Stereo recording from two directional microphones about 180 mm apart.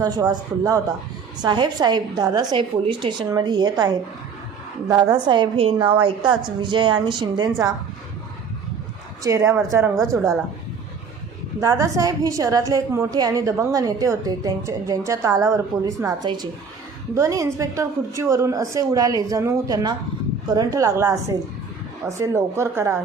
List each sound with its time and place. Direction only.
0.0 s a woman's voice: 20° right (ahead or behind)
9.2 s a woman's voice: 15° right (ahead or behind)
11.6 s a woman's voice: 20° right (ahead or behind)